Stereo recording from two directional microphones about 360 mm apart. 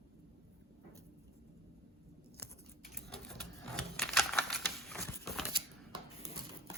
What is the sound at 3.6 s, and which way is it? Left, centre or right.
Typewriter, centre.